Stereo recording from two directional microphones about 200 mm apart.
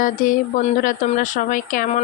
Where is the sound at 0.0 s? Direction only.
45° left (ahead or behind).